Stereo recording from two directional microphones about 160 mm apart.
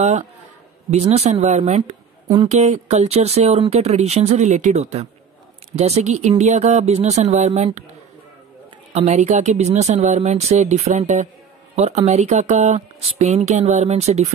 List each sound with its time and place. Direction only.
0.0 s speech: 45° right (ahead or behind)
8.9 s speech: 45° right (ahead or behind)